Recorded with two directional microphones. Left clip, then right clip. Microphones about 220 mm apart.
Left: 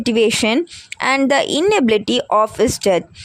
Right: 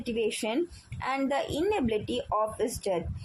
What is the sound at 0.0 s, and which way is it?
Speech, 50° left (ahead or behind).